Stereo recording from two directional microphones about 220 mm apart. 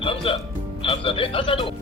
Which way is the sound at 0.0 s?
25° left (ahead or behind).